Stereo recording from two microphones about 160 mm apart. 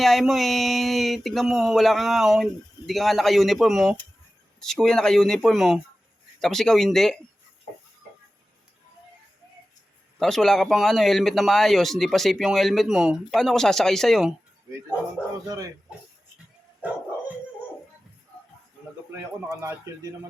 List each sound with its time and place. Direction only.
0.0 s a man's voice: centre (ahead or behind)
10.2 s a man's voice: 5° left (ahead or behind)
19.1 s speech: 15° right (ahead or behind)